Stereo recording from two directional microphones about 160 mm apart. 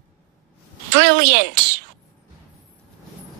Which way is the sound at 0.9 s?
90° right.